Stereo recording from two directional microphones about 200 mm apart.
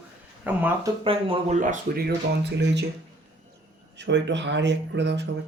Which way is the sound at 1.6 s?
45° right (ahead or behind).